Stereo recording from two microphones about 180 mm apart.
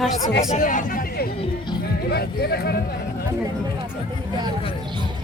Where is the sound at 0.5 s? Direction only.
45° left (ahead or behind).